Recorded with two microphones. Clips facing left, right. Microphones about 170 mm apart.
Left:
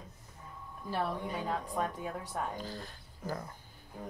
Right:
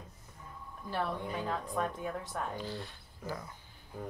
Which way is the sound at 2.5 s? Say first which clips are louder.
Right 2 dB; 40° left (ahead or behind).